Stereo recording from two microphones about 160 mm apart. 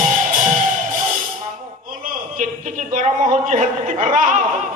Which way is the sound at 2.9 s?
50° right (ahead or behind).